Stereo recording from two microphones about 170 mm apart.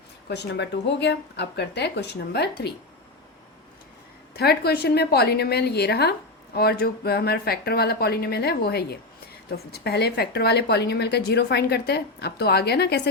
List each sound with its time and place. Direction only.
0.3 s speech: 85° left
4.4 s a woman's voice: 70° left (ahead or behind)